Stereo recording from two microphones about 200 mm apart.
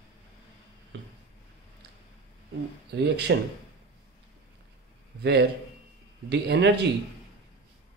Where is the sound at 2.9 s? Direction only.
55° right (ahead or behind).